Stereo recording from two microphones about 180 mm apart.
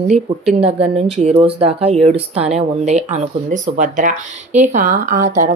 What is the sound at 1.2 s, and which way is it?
Speech, 30° right (ahead or behind).